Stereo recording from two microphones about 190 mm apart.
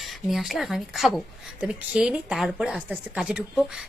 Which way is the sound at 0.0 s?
Centre (ahead or behind).